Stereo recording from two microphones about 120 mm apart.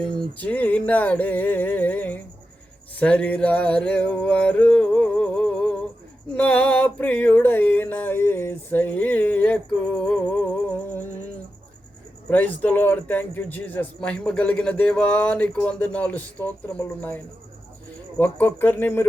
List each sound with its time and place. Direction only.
0.0 s a man's voice: 10° left (ahead or behind)
2.9 s a sound: 10° left (ahead or behind)
12.3 s a man's voice: 15° left (ahead or behind)
18.2 s a man's voice: 15° left (ahead or behind)